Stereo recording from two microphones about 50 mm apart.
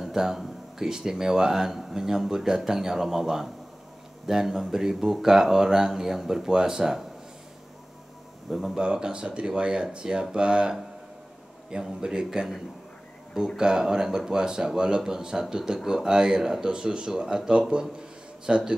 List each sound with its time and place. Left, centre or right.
0.0 s speech: centre
8.5 s speech: centre
8.7 s speech: centre
11.8 s speech: centre
13.6 s speech: centre
17.9 s a sound: centre